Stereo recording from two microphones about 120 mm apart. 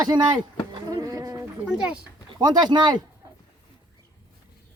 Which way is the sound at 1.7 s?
5° right (ahead or behind).